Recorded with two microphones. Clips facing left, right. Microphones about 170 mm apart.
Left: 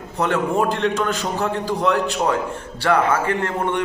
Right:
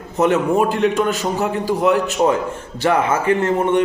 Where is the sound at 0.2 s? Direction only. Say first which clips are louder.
Right 4 dB; 15° right (ahead or behind).